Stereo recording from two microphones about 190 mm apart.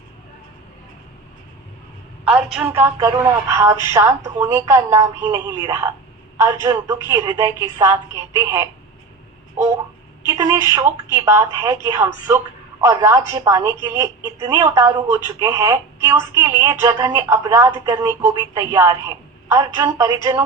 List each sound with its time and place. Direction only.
2.2 s speech: 5° right (ahead or behind)
10.3 s speech: 15° right (ahead or behind)